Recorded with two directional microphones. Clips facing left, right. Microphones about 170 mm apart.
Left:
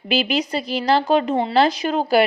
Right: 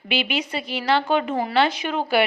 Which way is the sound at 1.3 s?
25° left (ahead or behind).